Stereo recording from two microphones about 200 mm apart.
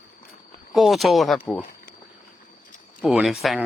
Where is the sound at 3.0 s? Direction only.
5° right (ahead or behind).